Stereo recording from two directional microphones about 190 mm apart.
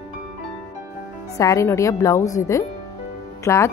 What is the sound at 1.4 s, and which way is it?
Speech, 15° left (ahead or behind).